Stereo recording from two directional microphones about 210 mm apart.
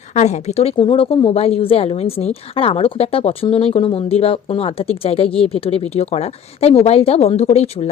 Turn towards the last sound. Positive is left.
turn(degrees=30)  # may be behind; listen again after turning